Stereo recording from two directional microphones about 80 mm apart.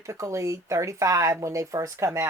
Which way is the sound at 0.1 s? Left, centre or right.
Right.